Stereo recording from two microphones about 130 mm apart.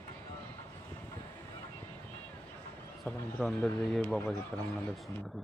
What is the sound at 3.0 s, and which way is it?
Speech, 10° left (ahead or behind).